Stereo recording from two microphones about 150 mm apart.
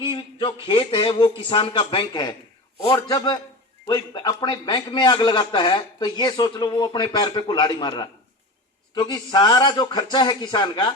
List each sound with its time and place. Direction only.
0.0 s a man's voice: 35° left (ahead or behind)